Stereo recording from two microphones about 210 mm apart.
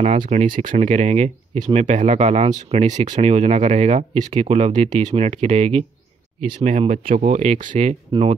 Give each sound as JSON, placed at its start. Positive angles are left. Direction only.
{"t": 0.0, "sound": "speech", "side_deg": -30}